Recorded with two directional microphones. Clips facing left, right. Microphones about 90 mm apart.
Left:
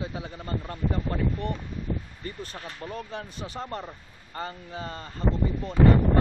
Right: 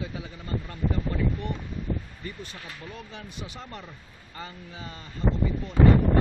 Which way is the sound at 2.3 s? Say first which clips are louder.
Left 5 dB; 40° left (ahead or behind).